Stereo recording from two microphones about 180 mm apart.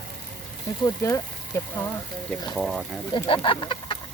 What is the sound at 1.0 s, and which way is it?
Speech, 15° left (ahead or behind).